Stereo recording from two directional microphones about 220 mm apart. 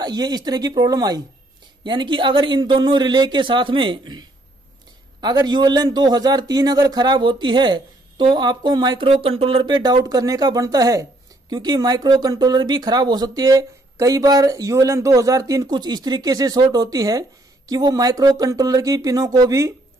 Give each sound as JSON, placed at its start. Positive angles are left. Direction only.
{"t": 0.0, "sound": "a man's voice", "side_deg": -20}